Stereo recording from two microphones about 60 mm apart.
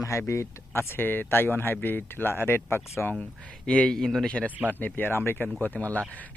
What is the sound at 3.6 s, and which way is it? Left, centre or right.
Speech, centre.